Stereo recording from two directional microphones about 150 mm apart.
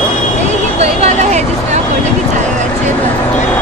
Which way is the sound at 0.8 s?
45° right (ahead or behind).